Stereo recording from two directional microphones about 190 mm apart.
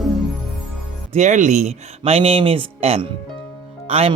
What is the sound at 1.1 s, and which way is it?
Speech, 40° right (ahead or behind).